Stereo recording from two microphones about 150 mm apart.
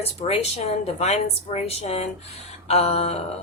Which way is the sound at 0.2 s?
45° left (ahead or behind).